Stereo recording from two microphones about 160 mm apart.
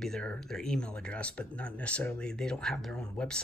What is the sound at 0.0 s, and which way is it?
Speech, 5° left (ahead or behind).